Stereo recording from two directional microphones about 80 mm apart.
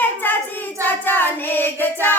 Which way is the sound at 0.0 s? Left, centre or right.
Left.